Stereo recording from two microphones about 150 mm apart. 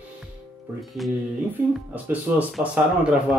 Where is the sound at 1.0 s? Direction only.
Centre (ahead or behind).